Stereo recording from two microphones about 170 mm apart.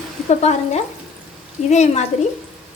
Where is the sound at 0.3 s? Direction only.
40° left (ahead or behind).